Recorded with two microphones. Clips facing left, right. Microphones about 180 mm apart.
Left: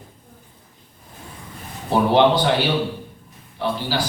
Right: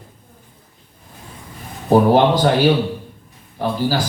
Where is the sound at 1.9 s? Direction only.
45° right (ahead or behind).